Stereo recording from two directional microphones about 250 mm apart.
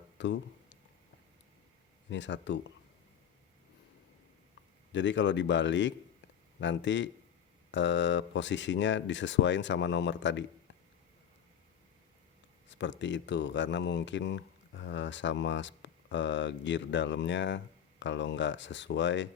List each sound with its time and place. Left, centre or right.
0.2 s a sound: left
2.0 s speech: left
4.9 s speech: left
12.6 s speech: left